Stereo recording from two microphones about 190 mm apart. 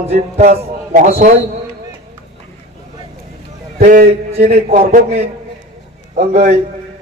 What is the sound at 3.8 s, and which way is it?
Speech, 45° right (ahead or behind).